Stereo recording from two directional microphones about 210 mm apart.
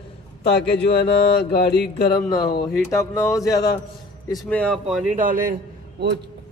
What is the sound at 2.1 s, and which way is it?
A man's voice, 20° left (ahead or behind).